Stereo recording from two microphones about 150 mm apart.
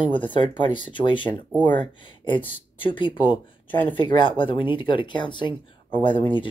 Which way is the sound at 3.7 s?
10° left (ahead or behind).